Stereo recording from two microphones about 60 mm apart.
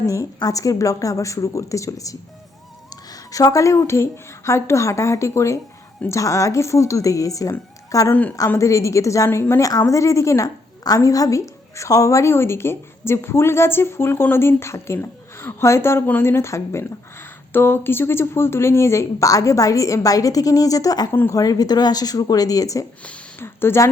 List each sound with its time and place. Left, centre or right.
0.0 s speech: left
2.9 s a woman's voice: left
14.9 s a sound: left
15.6 s a woman's voice: left
21.1 s a woman's voice: left
21.3 s a woman's voice: left
23.4 s speech: left